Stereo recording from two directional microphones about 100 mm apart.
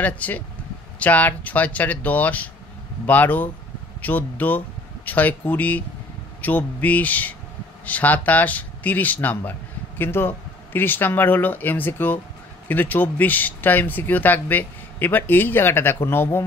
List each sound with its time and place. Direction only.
0.0 s a man's voice: 15° left (ahead or behind)